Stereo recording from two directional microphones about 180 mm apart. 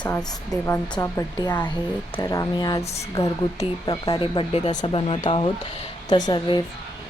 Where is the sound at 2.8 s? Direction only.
35° left (ahead or behind).